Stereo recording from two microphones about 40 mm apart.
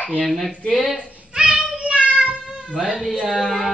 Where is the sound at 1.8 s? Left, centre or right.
Right.